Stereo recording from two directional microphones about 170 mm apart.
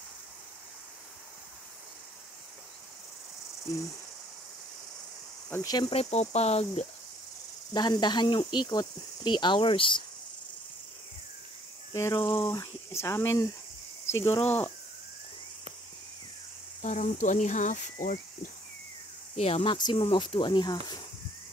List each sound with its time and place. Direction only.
5.5 s speech: 20° left (ahead or behind); by 6.9 s 35° left (ahead or behind)
7.7 s speech: 25° left (ahead or behind)
11.9 s speech: 20° left (ahead or behind)
12.4 s speech: 15° left (ahead or behind)
16.8 s speech: 45° left (ahead or behind)
19.3 s speech: 35° left (ahead or behind)